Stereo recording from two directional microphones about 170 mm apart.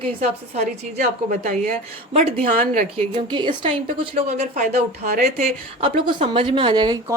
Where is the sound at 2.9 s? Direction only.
30° right (ahead or behind).